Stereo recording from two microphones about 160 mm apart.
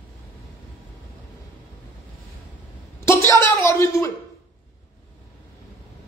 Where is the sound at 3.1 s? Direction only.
15° left (ahead or behind).